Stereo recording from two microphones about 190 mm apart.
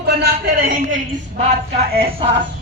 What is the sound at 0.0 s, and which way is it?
Speech, 55° right (ahead or behind).